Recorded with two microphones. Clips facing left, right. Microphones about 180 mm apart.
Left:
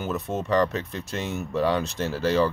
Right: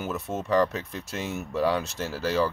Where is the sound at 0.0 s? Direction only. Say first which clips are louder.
Left 3 dB; 5° right (ahead or behind).